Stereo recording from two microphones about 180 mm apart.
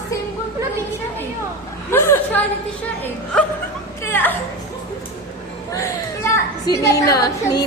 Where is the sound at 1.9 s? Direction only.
15° left (ahead or behind).